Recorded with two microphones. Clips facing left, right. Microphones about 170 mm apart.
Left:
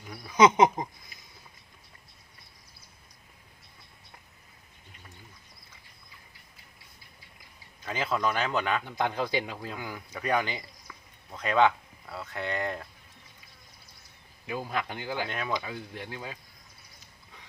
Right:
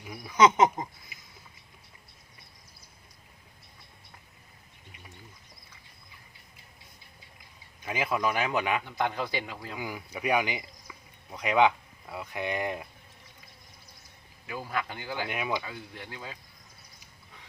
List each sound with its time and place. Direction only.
0.0 s speech: 15° right (ahead or behind)
0.3 s speech: 15° left (ahead or behind)
7.8 s speech: 10° right (ahead or behind)
8.8 s speech: 15° left (ahead or behind)
9.7 s speech: 10° right (ahead or behind)
14.4 s speech: 20° left (ahead or behind)
15.3 s speech: 15° right (ahead or behind)
15.6 s speech: 15° left (ahead or behind)